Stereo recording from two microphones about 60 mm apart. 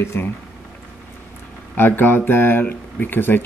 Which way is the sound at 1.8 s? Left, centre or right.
Left.